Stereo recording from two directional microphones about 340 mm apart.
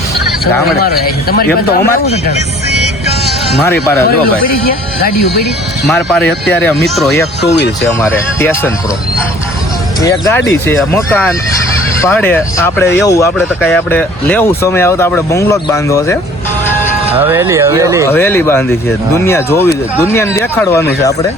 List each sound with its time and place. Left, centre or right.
0.8 s speech: left
5.9 s speech: centre
7.4 s speech: left
7.9 s speech: centre
10.0 s speech: centre
17.2 s speech: centre
18.1 s speech: centre